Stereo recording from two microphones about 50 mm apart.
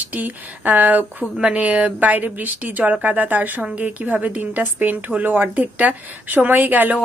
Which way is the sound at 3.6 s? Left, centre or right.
Right.